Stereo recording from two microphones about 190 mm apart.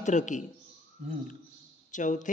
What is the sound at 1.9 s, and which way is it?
Speech, 40° left (ahead or behind).